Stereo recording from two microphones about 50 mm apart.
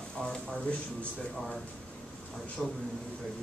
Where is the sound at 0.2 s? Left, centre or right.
Centre.